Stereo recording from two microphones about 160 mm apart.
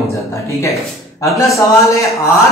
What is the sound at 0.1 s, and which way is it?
A woman's voice, 20° left (ahead or behind).